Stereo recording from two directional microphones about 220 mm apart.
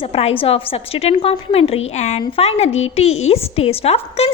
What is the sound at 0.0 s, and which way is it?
A woman's voice, 25° left (ahead or behind).